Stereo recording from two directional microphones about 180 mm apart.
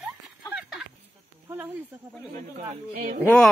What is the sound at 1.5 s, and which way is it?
Speech, 10° right (ahead or behind).